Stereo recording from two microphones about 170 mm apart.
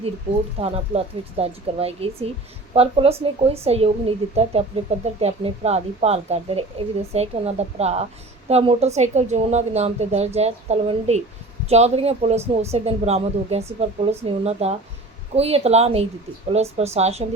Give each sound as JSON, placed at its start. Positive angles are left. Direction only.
{"t": 0.6, "sound": "a woman's voice", "side_deg": -35}